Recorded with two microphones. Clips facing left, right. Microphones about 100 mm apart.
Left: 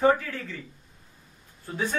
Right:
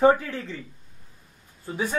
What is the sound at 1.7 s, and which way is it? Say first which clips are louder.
Speech: right 1 dB; 15° right (ahead or behind).